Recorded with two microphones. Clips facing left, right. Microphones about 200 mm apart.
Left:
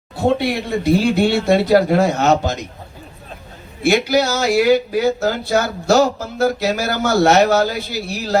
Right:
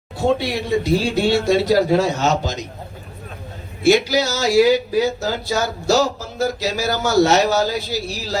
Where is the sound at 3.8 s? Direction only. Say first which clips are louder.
Even; 55° left (ahead or behind).